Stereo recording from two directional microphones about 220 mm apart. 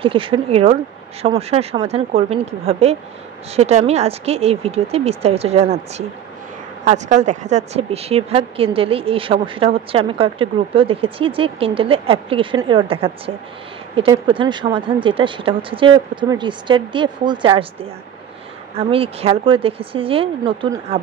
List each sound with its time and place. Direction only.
0.0 s speech: 25° right (ahead or behind)
18.8 s speech: 25° right (ahead or behind)